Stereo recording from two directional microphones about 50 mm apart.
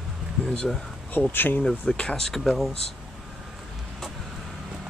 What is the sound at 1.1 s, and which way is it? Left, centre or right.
Speech, left.